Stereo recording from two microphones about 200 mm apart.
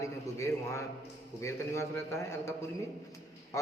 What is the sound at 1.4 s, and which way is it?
A man's voice, 15° left (ahead or behind).